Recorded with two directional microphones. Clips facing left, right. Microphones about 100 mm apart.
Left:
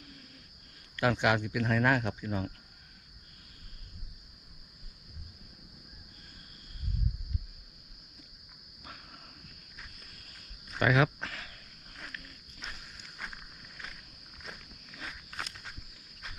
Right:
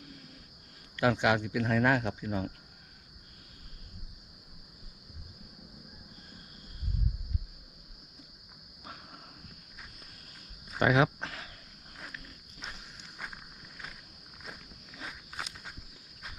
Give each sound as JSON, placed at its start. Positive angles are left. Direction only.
{"t": 0.9, "sound": "speech", "side_deg": -25}
{"t": 10.8, "sound": "a sound", "side_deg": -25}
{"t": 11.9, "sound": "walk", "side_deg": -10}
{"t": 15.0, "sound": "walk", "side_deg": -10}